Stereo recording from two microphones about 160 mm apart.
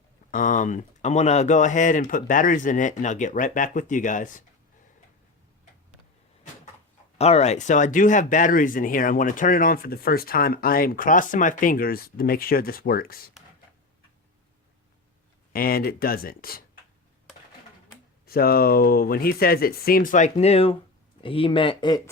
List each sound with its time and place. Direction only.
0.3 s speech: 55° left (ahead or behind)
7.2 s speech: 40° left (ahead or behind); by 13.3 s 70° left (ahead or behind)
15.5 s speech: 65° left (ahead or behind)
18.3 s speech: 70° left (ahead or behind); by 22.0 s 30° left (ahead or behind)